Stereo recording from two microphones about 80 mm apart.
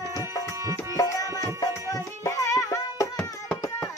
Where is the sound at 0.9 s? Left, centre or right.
Left.